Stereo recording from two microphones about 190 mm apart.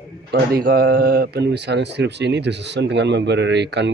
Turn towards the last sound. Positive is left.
turn(degrees=-65)  # may be behind; listen again after turning